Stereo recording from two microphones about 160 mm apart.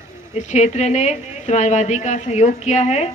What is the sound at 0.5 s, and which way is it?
Speech, 45° left (ahead or behind).